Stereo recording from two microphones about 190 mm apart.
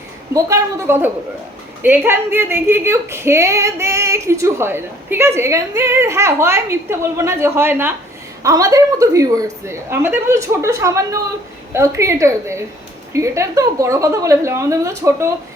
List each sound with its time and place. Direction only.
0.3 s speech: 15° right (ahead or behind)